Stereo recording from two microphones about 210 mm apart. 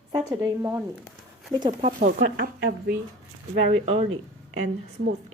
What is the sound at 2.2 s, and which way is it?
Speech, 45° right (ahead or behind).